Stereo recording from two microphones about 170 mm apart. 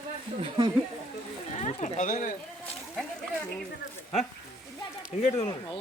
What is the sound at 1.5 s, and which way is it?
Speech, 40° left (ahead or behind).